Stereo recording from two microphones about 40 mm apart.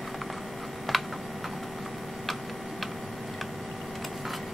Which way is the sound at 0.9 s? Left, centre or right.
Centre.